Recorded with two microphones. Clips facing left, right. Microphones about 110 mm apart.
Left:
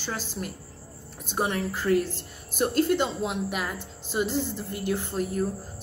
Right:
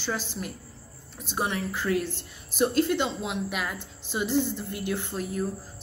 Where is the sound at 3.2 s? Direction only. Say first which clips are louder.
Left 2 dB; 40° left (ahead or behind).